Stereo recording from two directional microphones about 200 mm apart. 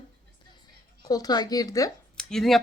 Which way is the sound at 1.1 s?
20° left (ahead or behind).